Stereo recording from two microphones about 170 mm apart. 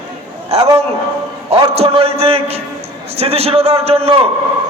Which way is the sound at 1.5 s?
35° right (ahead or behind).